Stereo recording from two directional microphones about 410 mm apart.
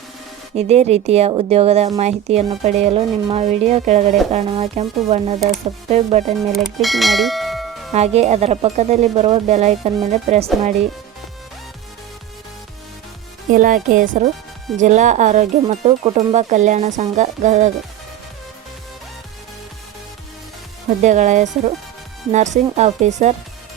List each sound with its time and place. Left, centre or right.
0.5 s a woman's voice: centre
6.5 s speech: centre
7.9 s a woman's voice: centre
13.5 s a woman's voice: centre
21.0 s a woman's voice: centre